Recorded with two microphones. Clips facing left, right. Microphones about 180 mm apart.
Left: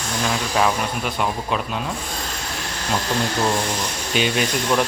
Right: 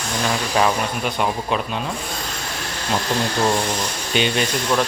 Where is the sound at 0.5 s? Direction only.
Centre (ahead or behind).